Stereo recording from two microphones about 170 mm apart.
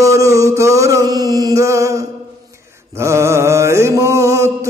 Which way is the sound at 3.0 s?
15° right (ahead or behind).